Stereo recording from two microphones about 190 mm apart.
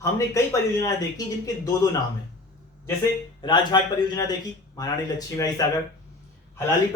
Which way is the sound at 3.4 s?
25° left (ahead or behind).